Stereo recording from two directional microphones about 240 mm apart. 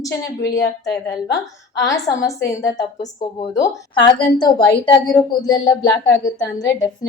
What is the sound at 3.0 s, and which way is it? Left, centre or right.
A woman's voice, left.